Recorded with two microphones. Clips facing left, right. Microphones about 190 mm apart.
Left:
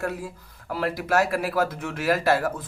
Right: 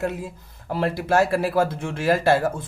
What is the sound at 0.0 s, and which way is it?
Speech, 20° right (ahead or behind).